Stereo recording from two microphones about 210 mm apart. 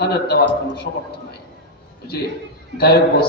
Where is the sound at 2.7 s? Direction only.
50° left (ahead or behind).